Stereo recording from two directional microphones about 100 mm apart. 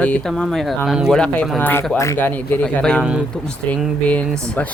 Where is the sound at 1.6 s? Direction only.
20° left (ahead or behind).